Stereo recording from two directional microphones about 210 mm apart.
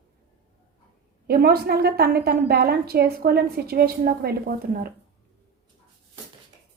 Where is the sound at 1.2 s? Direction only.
45° right (ahead or behind).